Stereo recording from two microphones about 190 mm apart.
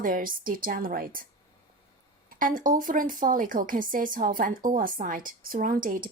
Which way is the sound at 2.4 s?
45° right (ahead or behind).